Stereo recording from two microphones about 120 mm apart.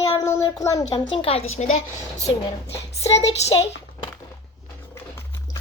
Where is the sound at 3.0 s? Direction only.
60° left (ahead or behind).